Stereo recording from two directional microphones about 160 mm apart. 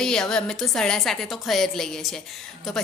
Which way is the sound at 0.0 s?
5° left (ahead or behind).